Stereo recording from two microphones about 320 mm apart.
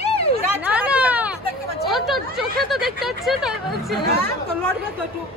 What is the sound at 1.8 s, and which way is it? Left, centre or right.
Chatter, centre.